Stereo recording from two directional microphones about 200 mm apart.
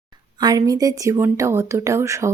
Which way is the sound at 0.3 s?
20° right (ahead or behind).